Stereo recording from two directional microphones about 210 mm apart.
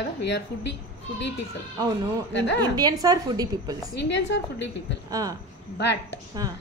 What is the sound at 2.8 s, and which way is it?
A woman's voice, 20° right (ahead or behind).